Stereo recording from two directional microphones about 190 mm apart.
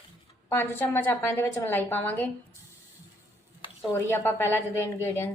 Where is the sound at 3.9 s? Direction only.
10° left (ahead or behind).